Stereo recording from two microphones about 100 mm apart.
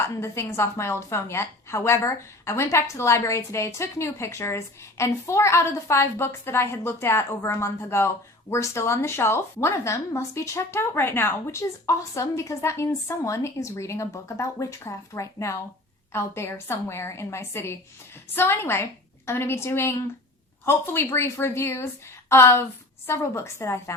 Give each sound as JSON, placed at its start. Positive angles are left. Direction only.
{"t": 0.0, "sound": "a woman's voice", "side_deg": 25}